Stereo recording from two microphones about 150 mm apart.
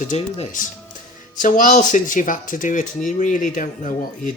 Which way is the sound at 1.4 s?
60° left (ahead or behind).